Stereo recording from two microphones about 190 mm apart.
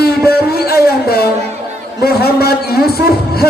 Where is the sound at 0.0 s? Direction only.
55° left (ahead or behind).